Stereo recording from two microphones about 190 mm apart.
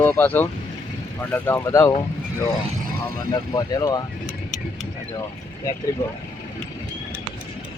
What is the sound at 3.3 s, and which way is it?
Speech, 20° left (ahead or behind).